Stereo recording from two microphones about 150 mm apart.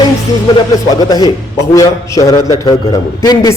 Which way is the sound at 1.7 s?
20° left (ahead or behind).